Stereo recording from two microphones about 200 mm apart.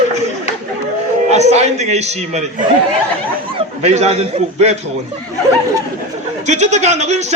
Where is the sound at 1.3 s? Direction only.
35° right (ahead or behind).